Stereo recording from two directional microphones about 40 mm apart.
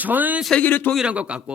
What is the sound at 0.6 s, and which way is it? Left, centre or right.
Speech, left.